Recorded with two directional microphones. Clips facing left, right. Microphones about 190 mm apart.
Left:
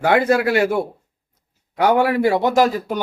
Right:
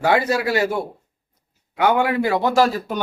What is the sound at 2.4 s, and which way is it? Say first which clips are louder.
Speech: left 1 dB; 20° left (ahead or behind).